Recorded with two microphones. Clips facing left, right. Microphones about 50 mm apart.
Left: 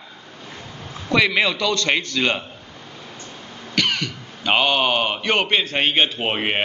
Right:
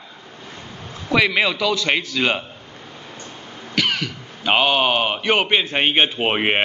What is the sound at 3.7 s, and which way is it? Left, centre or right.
Speech, centre.